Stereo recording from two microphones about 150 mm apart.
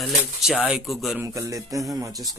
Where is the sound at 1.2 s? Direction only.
20° right (ahead or behind).